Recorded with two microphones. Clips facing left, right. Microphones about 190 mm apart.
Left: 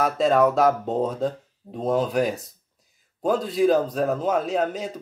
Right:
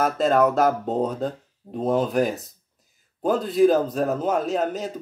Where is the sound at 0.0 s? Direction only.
Centre (ahead or behind).